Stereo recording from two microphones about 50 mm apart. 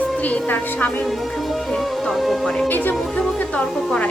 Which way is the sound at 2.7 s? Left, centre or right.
Left.